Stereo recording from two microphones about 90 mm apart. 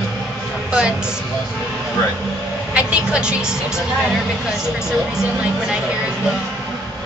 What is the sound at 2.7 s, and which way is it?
Speech, 15° right (ahead or behind).